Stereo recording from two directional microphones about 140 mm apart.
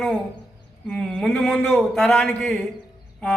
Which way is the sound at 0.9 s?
5° left (ahead or behind).